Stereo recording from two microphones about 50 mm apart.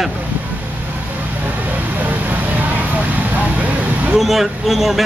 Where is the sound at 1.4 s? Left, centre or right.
Right.